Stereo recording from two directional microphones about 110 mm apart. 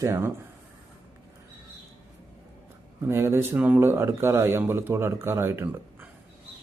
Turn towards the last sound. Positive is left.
turn(degrees=-20)  # may be behind; listen again after turning